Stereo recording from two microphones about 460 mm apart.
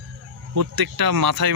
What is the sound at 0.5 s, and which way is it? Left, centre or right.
Speech, right.